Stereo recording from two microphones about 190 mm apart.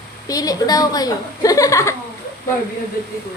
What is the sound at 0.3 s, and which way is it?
A woman's voice, 20° left (ahead or behind).